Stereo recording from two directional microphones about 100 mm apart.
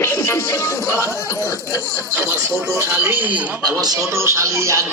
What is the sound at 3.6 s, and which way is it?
Speech, 40° right (ahead or behind).